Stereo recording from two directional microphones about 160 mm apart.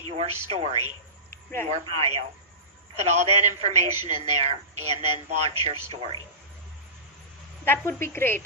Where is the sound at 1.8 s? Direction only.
40° right (ahead or behind).